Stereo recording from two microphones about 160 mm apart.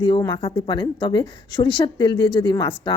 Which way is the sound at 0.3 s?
30° left (ahead or behind).